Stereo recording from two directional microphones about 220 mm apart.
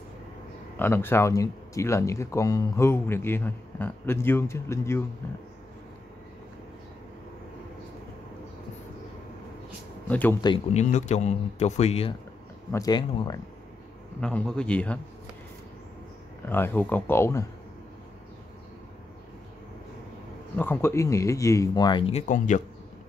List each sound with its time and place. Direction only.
0.7 s speech: 10° left (ahead or behind)
10.0 s speech: 5° left (ahead or behind)
10.4 s speech: 25° left (ahead or behind)
12.7 s speech: 20° left (ahead or behind)
14.2 s a man's voice: 5° left (ahead or behind)
16.4 s speech: 10° left (ahead or behind)
20.5 s speech: 10° left (ahead or behind); by 22.6 s 30° left (ahead or behind)